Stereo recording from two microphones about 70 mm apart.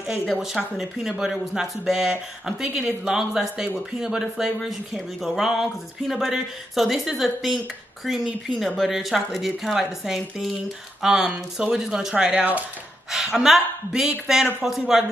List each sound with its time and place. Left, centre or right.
0.6 s speech: centre
12.3 s speech: right
13.1 s speech: centre